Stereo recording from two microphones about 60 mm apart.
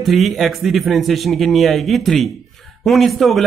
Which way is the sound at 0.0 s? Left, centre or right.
Centre.